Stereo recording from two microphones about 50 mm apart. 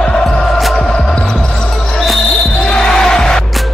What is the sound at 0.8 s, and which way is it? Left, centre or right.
Basketball bounce, centre.